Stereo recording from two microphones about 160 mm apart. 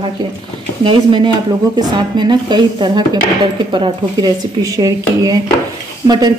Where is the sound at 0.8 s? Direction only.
30° right (ahead or behind).